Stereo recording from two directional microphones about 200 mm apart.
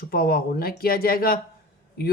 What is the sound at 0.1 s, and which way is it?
Speech, 50° left (ahead or behind).